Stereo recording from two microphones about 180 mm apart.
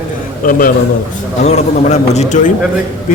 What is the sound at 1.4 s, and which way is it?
A man's voice, 40° left (ahead or behind).